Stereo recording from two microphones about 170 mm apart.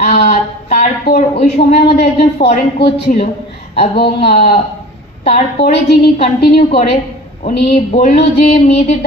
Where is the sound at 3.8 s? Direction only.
65° left (ahead or behind).